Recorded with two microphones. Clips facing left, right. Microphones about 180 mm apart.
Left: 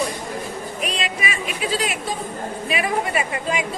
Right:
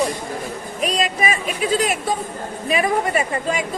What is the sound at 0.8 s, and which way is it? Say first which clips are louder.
A woman's voice: right 7 dB; 40° right (ahead or behind).